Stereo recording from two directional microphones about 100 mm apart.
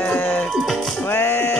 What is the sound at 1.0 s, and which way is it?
Music, 20° left (ahead or behind).